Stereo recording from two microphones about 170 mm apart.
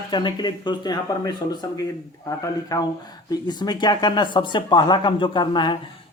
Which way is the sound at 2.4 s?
20° left (ahead or behind).